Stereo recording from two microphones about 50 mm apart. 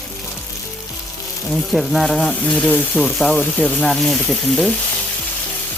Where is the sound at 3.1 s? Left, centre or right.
Centre.